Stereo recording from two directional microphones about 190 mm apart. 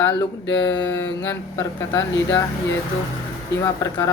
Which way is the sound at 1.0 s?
10° left (ahead or behind).